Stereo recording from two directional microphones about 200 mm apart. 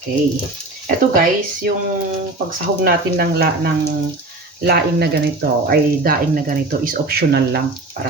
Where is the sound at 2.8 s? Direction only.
50° right (ahead or behind).